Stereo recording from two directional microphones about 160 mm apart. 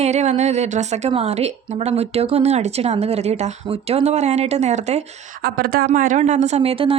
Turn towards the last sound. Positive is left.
turn(degrees=-35)  # may be behind; listen again after turning